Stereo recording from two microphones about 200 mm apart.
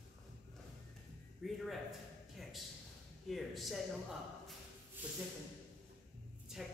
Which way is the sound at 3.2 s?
Centre (ahead or behind).